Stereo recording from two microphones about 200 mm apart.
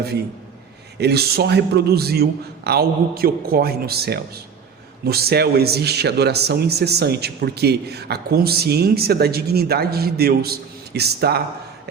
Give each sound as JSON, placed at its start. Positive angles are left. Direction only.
{"t": 0.9, "sound": "a man's voice", "side_deg": -55}